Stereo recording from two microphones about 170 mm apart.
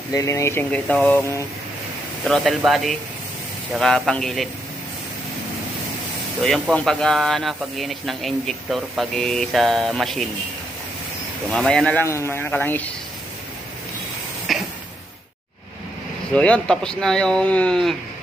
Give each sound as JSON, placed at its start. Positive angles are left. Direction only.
{"t": 0.1, "sound": "speech", "side_deg": 20}
{"t": 2.2, "sound": "speech", "side_deg": 0}
{"t": 6.4, "sound": "speech", "side_deg": 5}
{"t": 11.5, "sound": "speech", "side_deg": 5}
{"t": 14.5, "sound": "cough", "side_deg": 0}
{"t": 16.3, "sound": "speech", "side_deg": 5}